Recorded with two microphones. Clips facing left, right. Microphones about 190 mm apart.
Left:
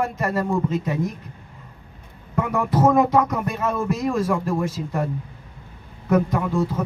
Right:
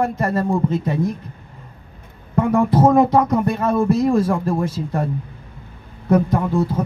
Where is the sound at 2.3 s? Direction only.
30° right (ahead or behind).